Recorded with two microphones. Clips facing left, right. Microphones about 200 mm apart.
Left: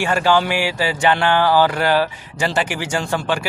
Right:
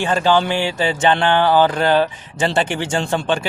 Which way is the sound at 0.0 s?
20° right (ahead or behind).